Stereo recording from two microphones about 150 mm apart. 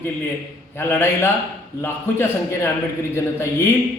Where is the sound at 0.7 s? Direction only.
15° left (ahead or behind).